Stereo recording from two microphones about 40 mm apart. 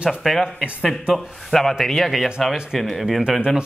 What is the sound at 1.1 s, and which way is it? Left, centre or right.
A man's voice, centre.